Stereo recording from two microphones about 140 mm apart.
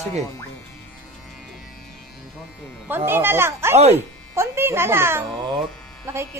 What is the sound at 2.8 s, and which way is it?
Speech, 15° right (ahead or behind).